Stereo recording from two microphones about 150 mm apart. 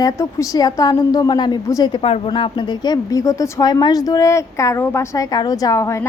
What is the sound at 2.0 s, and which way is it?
Speech, 40° left (ahead or behind).